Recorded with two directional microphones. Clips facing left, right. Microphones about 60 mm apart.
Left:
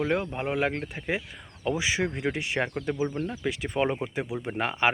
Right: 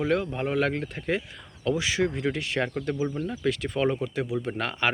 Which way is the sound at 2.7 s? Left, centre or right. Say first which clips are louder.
Even; centre.